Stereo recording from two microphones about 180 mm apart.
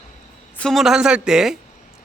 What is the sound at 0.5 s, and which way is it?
Speech, 5° left (ahead or behind).